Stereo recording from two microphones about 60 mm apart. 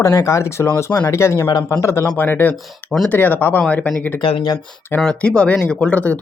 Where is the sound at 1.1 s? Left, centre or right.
Left.